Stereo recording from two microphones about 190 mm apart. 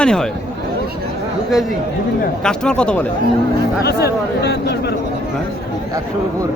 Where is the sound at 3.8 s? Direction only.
60° left (ahead or behind).